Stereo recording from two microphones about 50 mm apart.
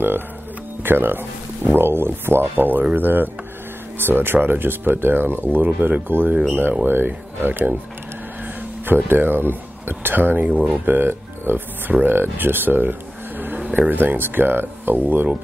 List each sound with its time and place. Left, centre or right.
0.8 s speech: right
2.5 s speech: right
8.8 s speech: right
10.9 s speech: right